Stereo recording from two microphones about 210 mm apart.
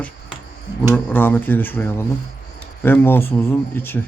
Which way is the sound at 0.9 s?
10° left (ahead or behind).